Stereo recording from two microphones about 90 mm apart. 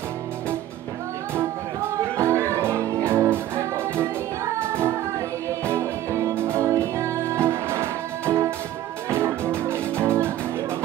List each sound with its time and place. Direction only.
2.1 s music: 30° right (ahead or behind)